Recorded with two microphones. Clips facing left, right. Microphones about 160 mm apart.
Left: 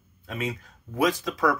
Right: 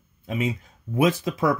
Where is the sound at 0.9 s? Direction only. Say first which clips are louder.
Right 3 dB; 25° right (ahead or behind).